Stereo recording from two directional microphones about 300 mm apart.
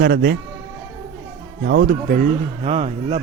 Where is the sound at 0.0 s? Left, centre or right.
Right.